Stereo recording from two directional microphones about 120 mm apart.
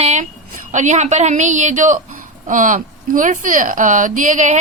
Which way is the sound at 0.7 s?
85° right.